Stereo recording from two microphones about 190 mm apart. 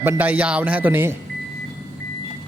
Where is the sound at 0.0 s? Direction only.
10° right (ahead or behind).